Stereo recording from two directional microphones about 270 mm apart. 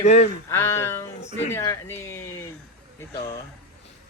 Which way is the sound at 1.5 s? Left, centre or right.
Centre.